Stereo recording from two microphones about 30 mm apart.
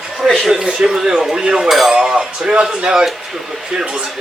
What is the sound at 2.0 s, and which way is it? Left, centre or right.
Speech, right.